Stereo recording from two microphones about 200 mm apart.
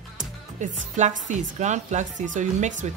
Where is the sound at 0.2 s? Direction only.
40° right (ahead or behind).